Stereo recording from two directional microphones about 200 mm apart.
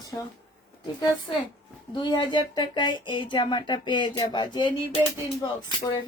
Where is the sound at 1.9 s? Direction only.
20° left (ahead or behind).